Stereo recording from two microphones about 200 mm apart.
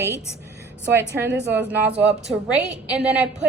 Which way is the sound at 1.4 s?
10° right (ahead or behind).